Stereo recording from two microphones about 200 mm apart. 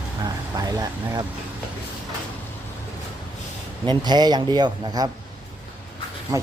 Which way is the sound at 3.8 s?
20° right (ahead or behind).